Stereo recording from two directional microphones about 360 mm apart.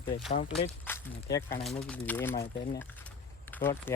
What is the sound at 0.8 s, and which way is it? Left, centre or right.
Speech, centre.